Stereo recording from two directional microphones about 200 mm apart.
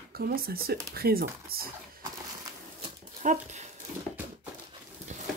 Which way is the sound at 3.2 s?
35° right (ahead or behind).